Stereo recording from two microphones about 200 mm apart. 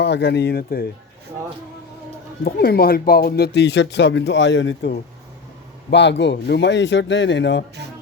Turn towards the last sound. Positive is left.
turn(degrees=60)  # may be behind; listen again after turning